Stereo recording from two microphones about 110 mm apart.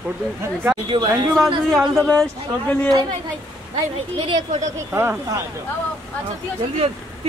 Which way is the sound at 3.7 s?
45° right (ahead or behind).